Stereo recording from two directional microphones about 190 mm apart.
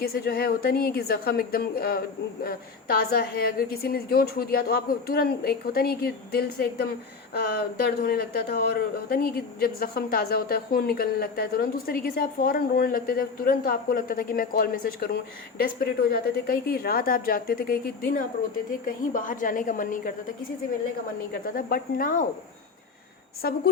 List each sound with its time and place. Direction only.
0.0 s a man's voice: 50° left (ahead or behind)
21.3 s a man's voice: 50° left (ahead or behind)
23.4 s a man's voice: 50° left (ahead or behind)